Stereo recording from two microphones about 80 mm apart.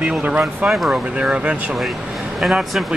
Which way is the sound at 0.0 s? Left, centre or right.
Centre.